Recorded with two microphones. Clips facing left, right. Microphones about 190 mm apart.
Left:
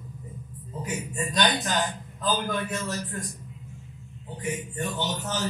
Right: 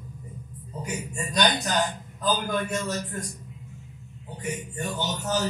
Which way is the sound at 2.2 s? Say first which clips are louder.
Right 1 dB; 40° right (ahead or behind).